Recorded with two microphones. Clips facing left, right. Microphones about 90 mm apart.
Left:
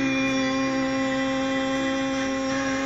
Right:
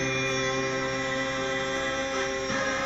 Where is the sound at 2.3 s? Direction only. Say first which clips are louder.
Left 5 dB; 15° left (ahead or behind).